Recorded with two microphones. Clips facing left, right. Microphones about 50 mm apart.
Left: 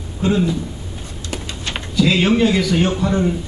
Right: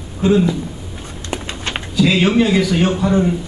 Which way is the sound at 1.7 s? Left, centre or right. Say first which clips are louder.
Right 1 dB; centre.